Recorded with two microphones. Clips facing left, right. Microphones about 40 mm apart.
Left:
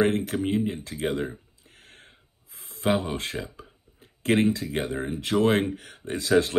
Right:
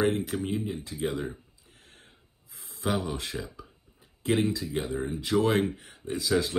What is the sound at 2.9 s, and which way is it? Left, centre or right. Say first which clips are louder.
Speech: left 5 dB; left.